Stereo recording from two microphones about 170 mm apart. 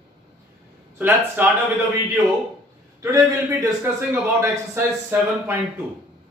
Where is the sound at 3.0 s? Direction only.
20° right (ahead or behind).